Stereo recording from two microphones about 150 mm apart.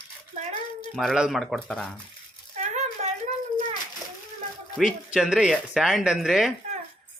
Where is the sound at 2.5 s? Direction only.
50° right (ahead or behind).